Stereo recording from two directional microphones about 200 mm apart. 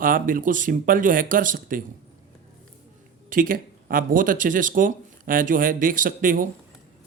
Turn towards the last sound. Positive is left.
turn(degrees=-45)  # may be behind; listen again after turning